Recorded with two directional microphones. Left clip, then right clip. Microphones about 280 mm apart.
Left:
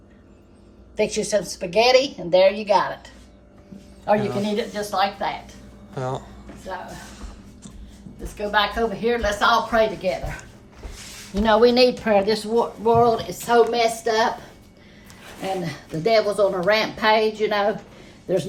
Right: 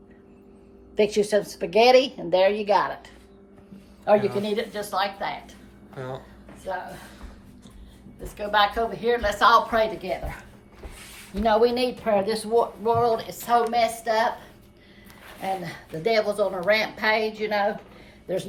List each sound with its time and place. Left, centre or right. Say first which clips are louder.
0.9 s a woman's voice: even; right
4.5 s speech: left 3 dB; centre
6.0 s speech: left 7 dB; centre
8.4 s speech: left 1 dB; centre
11.4 s speech: left 5 dB; centre
15.4 s speech: left 2 dB; centre